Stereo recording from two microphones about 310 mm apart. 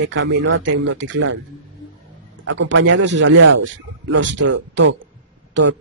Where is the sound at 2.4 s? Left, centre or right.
Right.